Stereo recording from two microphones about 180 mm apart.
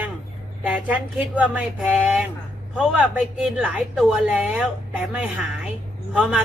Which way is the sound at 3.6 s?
5° right (ahead or behind).